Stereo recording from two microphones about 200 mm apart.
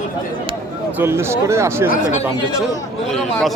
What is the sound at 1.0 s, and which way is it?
Speech, 10° right (ahead or behind).